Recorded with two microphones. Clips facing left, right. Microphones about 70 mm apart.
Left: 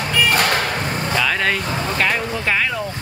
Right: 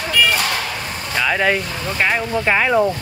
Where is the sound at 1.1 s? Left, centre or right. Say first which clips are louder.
Right 3 dB; centre.